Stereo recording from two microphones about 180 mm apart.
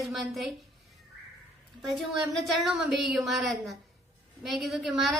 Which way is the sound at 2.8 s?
70° right (ahead or behind).